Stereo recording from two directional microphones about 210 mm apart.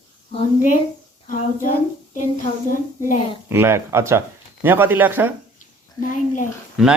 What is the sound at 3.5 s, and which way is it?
A man's voice, 10° right (ahead or behind).